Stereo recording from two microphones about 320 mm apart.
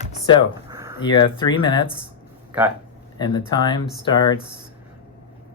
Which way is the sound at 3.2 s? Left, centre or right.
Centre.